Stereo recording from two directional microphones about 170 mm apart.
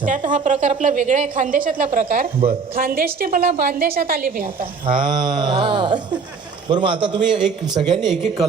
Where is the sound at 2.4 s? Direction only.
35° right (ahead or behind).